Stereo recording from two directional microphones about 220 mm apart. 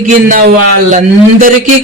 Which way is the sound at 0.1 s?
35° right (ahead or behind).